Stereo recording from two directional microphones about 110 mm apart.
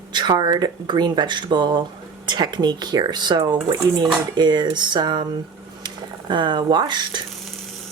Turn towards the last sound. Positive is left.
turn(degrees=-40)  # may be behind; listen again after turning